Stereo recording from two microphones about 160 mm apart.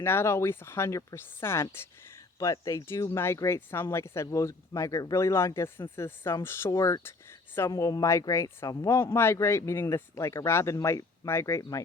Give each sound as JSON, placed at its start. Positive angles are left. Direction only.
{"t": 0.0, "sound": "speech", "side_deg": 15}